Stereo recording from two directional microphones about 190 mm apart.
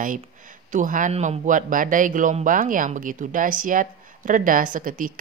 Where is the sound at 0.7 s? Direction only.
45° right (ahead or behind).